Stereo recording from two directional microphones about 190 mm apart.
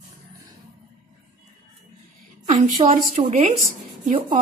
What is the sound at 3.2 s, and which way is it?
A woman's voice, 35° right (ahead or behind).